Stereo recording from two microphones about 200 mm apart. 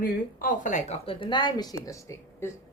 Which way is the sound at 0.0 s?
45° left (ahead or behind).